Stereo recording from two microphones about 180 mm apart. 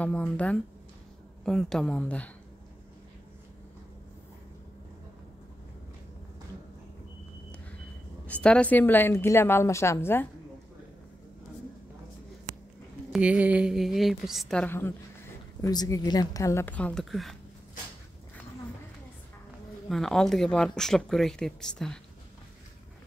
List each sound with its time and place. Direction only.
0.0 s a woman's voice: 5° left (ahead or behind)
8.3 s a woman's voice: 5° left (ahead or behind)
13.1 s a woman's voice: 5° right (ahead or behind)
19.9 s speech: centre (ahead or behind)